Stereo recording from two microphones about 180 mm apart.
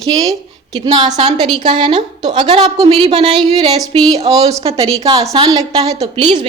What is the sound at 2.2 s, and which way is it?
A woman's voice, 25° right (ahead or behind).